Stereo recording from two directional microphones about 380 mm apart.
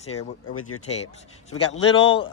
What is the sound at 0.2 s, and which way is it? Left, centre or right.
Speech, left.